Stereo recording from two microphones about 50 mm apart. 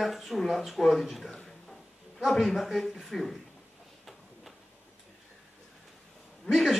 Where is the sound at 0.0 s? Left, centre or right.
Centre.